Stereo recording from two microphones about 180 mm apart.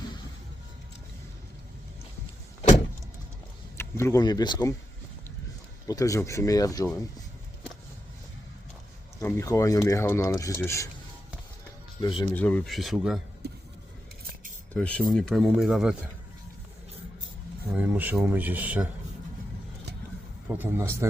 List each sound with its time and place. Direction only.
3.8 s speech: 15° left (ahead or behind)
5.9 s speech: 20° left (ahead or behind)
9.2 s speech: 15° left (ahead or behind)
11.9 s speech: 25° left (ahead or behind)
12.3 s speech: 10° left (ahead or behind)
14.7 s speech: 5° left (ahead or behind)
17.7 s speech: 10° right (ahead or behind)
20.5 s speech: 10° right (ahead or behind)